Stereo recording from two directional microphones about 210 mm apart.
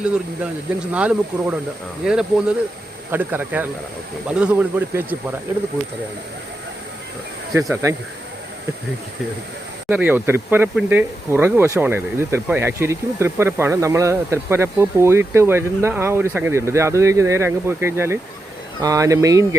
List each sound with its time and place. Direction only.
0.9 s speech: 5° right (ahead or behind)
7.7 s speech: 15° right (ahead or behind)
9.9 s speech: 10° right (ahead or behind)